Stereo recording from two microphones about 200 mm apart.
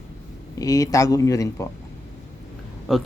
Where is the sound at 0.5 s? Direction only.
15° left (ahead or behind).